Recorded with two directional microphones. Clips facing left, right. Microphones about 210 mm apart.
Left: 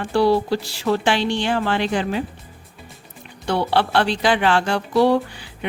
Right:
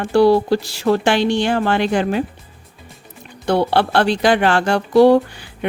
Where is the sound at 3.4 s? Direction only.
50° right (ahead or behind).